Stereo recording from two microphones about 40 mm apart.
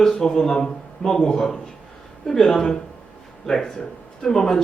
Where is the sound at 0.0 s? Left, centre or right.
Centre.